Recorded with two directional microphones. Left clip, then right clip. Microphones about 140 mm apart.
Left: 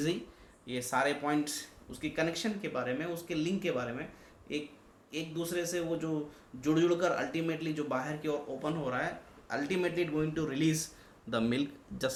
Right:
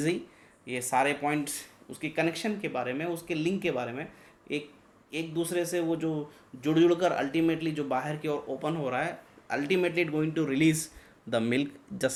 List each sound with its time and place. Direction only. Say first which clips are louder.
0.6 s speech: right 4 dB; 40° right (ahead or behind)
11.3 s speech: right 4 dB; 40° right (ahead or behind)